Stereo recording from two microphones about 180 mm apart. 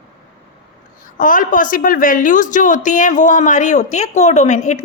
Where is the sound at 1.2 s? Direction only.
50° left (ahead or behind).